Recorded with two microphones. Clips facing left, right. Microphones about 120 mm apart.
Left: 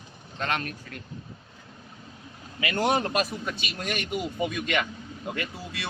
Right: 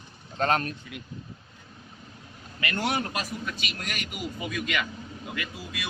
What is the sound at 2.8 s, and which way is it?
Speech, 25° left (ahead or behind).